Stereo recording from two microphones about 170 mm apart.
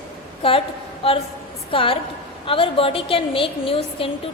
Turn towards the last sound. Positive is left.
turn(degrees=30)  # may be behind; listen again after turning